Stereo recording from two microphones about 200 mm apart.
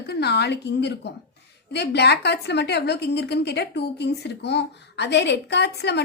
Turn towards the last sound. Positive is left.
turn(degrees=55)  # may be behind; listen again after turning